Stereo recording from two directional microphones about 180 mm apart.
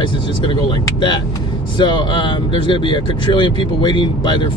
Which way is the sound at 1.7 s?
25° left (ahead or behind).